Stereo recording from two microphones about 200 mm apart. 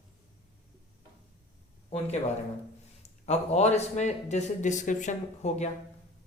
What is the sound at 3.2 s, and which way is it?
A man's voice, 35° left (ahead or behind).